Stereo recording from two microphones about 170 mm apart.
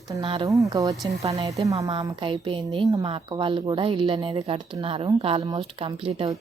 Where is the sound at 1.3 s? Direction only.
30° right (ahead or behind).